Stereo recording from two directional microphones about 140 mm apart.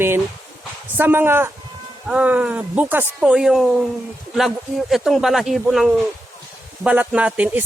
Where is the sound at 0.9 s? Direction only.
15° right (ahead or behind).